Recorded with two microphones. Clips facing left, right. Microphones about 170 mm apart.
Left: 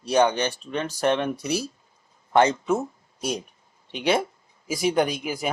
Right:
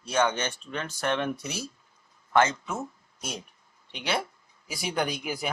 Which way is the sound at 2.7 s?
30° left (ahead or behind).